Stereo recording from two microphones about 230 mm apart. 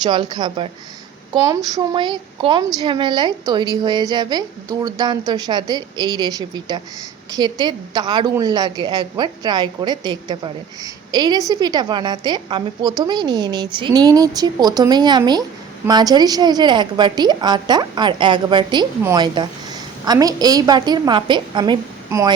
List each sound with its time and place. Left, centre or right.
0.0 s a woman's voice: centre